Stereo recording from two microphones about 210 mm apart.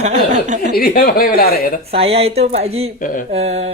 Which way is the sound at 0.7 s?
45° left (ahead or behind).